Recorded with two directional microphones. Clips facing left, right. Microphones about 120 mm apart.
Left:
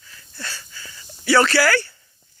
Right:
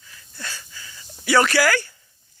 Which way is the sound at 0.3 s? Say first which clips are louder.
Left 1 dB; 15° right (ahead or behind).